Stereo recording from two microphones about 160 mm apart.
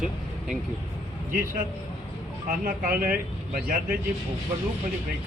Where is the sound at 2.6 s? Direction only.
65° right (ahead or behind).